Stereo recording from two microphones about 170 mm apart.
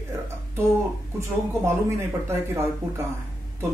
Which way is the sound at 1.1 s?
15° right (ahead or behind).